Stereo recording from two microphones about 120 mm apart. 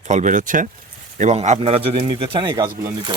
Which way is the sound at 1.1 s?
70° right (ahead or behind).